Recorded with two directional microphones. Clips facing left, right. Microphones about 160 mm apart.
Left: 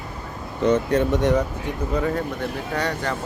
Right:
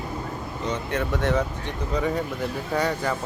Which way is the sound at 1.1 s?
15° left (ahead or behind).